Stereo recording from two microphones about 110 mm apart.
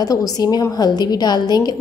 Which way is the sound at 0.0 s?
35° left (ahead or behind).